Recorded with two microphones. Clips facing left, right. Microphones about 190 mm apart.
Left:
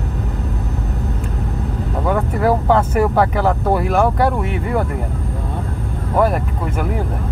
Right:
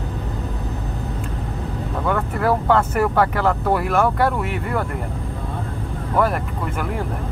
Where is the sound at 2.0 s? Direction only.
10° left (ahead or behind).